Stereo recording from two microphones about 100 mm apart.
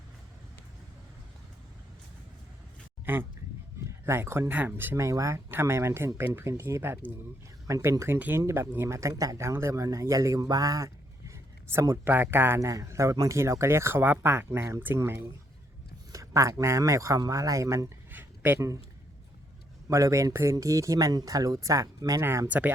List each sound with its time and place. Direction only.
3.1 s speech: 20° right (ahead or behind)
4.9 s speech: 30° right (ahead or behind)
19.9 s speech: 30° right (ahead or behind)